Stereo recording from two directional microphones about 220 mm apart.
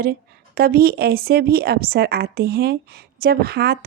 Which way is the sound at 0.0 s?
45° right (ahead or behind).